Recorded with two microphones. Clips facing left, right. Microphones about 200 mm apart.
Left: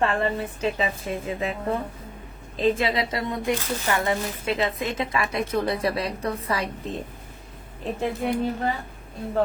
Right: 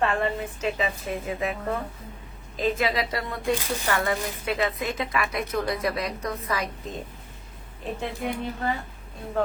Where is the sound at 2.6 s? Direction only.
25° left (ahead or behind).